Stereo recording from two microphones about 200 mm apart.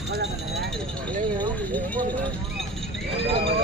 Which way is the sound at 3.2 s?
30° right (ahead or behind).